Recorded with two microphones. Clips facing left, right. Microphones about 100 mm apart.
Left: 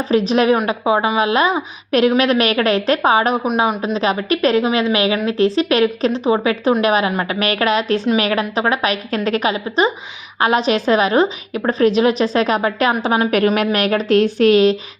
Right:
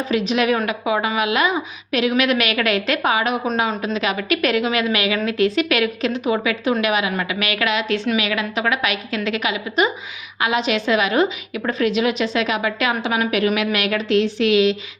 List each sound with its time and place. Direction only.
0.1 s a woman's voice: 35° left (ahead or behind)